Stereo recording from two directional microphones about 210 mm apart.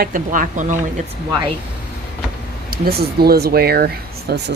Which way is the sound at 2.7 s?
45° right (ahead or behind).